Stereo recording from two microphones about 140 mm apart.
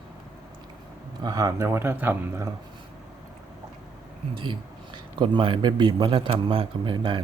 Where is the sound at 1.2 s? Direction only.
25° right (ahead or behind).